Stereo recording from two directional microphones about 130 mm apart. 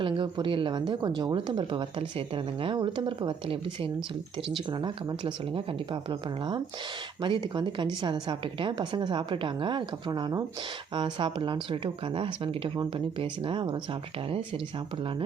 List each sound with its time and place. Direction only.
0.0 s speech: 40° right (ahead or behind)